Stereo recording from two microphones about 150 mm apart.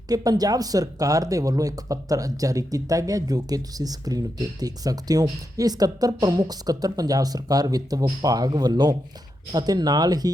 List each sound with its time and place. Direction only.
0.1 s speech: 25° right (ahead or behind)